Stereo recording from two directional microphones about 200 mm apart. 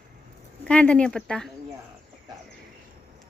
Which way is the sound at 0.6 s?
5° left (ahead or behind).